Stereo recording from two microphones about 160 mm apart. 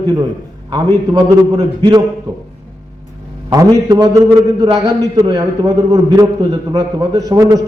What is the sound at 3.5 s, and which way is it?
A man's voice, 20° right (ahead or behind).